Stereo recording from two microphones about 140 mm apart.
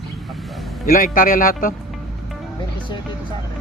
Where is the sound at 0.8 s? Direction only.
85° left.